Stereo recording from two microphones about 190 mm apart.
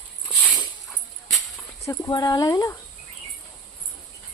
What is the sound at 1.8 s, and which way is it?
Speech, 20° left (ahead or behind).